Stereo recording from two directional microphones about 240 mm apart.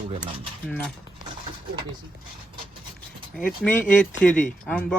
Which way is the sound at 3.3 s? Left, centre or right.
Centre.